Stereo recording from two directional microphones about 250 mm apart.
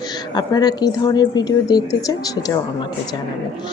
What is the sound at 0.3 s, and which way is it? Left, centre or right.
A woman's voice, centre.